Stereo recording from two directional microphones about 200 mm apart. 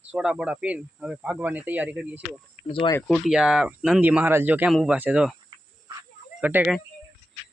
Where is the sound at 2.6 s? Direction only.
25° left (ahead or behind).